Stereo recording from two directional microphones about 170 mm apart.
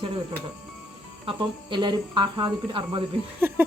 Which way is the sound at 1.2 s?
25° right (ahead or behind).